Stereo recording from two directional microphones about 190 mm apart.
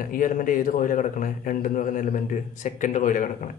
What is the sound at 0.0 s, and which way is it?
A man's voice, 45° left (ahead or behind).